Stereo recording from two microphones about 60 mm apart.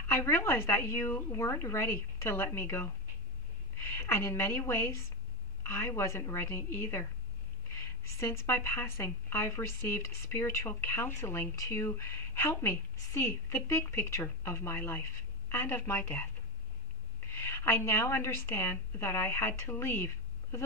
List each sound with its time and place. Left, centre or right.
0.1 s a woman's voice: left
17.3 s a woman's voice: left